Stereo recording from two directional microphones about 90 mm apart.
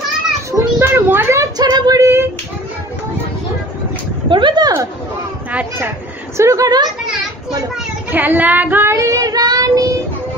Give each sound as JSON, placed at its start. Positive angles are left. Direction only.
{"t": 0.5, "sound": "children playing", "side_deg": -35}
{"t": 1.0, "sound": "a sound", "side_deg": -25}
{"t": 1.4, "sound": "female singing", "side_deg": -45}
{"t": 4.3, "sound": "a sound", "side_deg": -60}
{"t": 6.3, "sound": "child singing", "side_deg": -35}
{"t": 8.1, "sound": "child singing", "side_deg": -20}
{"t": 8.9, "sound": "child singing", "side_deg": -40}